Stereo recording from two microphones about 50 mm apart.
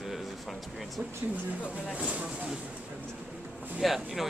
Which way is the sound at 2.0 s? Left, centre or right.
Right.